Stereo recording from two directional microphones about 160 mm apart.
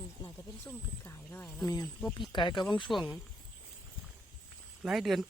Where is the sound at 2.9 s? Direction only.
Centre (ahead or behind).